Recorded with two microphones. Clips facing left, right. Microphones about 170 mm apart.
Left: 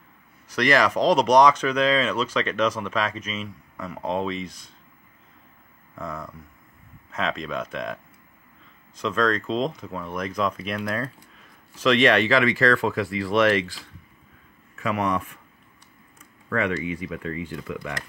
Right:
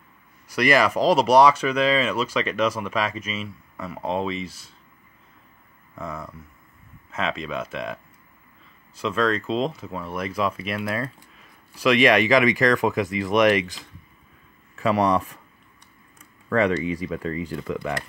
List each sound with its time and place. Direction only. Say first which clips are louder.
0.5 s speech: right 1 dB; 10° right (ahead or behind)
5.9 s speech: even; 5° right (ahead or behind)
14.8 s speech: right 5 dB; 30° right (ahead or behind)
16.4 s speech: right 4 dB; 35° right (ahead or behind)